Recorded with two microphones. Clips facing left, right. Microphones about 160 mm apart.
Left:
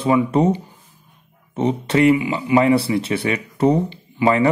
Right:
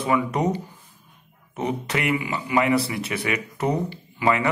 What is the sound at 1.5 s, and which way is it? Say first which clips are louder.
Speech: left 8 dB; 30° left (ahead or behind).